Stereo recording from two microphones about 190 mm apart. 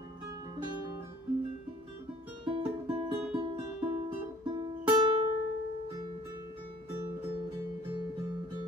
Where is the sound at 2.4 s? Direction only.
30° right (ahead or behind).